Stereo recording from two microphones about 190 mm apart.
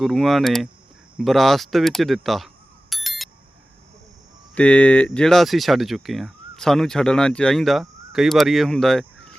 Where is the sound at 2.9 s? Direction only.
Centre (ahead or behind).